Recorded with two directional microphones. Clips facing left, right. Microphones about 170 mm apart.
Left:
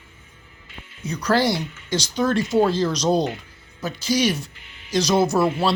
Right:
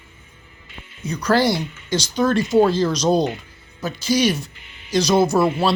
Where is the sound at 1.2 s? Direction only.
50° right (ahead or behind).